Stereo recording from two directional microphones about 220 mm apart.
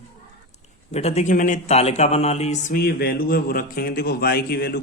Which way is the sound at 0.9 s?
30° left (ahead or behind).